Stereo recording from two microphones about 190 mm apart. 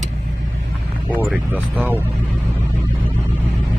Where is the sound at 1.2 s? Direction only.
10° right (ahead or behind).